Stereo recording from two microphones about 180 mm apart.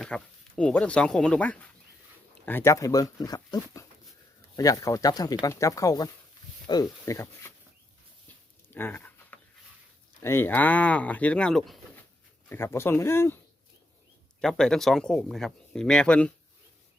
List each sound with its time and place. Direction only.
0.0 s speech: 5° left (ahead or behind)
8.7 s a sound: 10° left (ahead or behind)
10.2 s speech: 10° left (ahead or behind)
12.5 s speech: 15° left (ahead or behind)
14.4 s speech: centre (ahead or behind)